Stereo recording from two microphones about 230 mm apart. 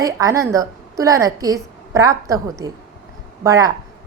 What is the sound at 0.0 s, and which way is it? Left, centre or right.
A woman's voice, centre.